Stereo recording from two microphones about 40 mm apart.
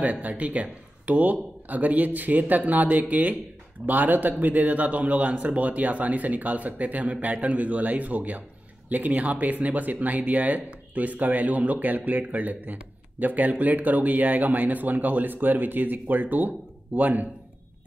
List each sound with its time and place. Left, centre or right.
0.0 s speech: right